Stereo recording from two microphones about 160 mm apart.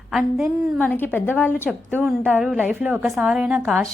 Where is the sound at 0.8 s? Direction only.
10° left (ahead or behind).